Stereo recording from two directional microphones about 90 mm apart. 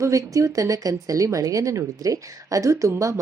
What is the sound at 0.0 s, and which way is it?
Speech, 35° right (ahead or behind).